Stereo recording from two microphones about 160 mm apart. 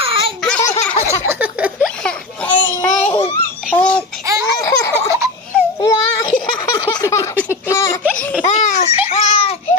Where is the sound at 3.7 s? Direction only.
10° left (ahead or behind).